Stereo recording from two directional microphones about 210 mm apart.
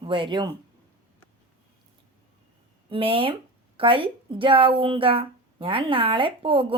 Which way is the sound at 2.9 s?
25° right (ahead or behind).